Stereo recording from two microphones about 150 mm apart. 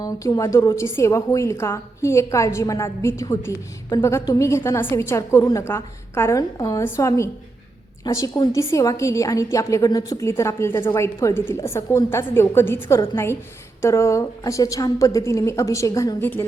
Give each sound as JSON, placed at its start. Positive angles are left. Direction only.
{"t": 0.0, "sound": "a woman's voice", "side_deg": 25}